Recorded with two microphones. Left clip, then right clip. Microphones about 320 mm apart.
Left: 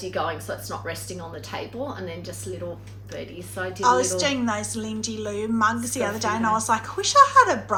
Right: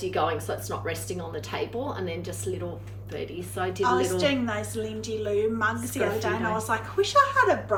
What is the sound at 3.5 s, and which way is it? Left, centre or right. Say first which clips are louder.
Speech: even; centre.